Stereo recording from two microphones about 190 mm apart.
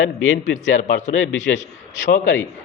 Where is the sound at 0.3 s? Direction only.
40° left (ahead or behind).